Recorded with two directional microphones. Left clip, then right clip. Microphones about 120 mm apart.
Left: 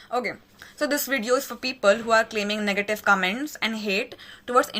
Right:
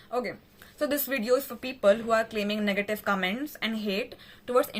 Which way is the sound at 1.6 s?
15° right (ahead or behind).